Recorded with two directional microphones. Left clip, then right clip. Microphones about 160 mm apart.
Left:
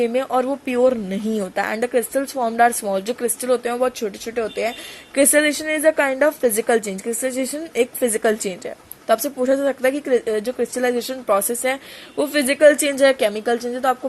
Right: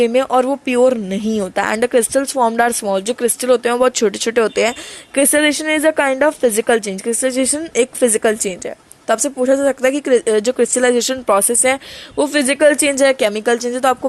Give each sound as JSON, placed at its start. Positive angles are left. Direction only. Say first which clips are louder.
{"t": 0.0, "sound": "speech", "louder": "right 6 dB", "side_deg": -25}
{"t": 5.1, "sound": "speech", "louder": "right 2 dB", "side_deg": -15}